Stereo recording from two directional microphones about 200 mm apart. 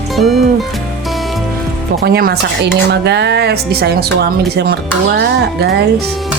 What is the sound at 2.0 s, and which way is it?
Speech, 50° right (ahead or behind).